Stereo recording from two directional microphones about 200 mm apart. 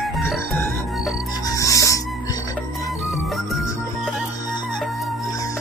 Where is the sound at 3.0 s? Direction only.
Centre (ahead or behind).